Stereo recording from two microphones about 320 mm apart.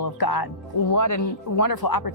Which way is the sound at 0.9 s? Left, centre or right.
Left.